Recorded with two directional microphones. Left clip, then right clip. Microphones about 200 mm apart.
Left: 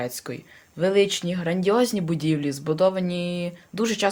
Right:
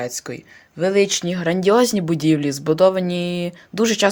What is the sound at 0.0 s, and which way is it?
Speech, 20° right (ahead or behind).